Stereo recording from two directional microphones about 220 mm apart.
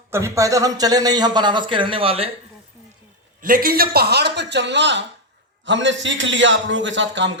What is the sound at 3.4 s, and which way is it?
A man's voice, 40° right (ahead or behind).